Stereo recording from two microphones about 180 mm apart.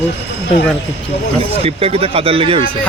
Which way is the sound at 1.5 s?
35° right (ahead or behind).